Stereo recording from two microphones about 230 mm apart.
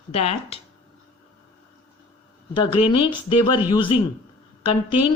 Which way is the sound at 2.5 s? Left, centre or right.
Left.